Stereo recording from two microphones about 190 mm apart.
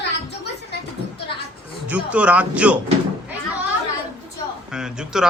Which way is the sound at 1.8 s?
5° right (ahead or behind).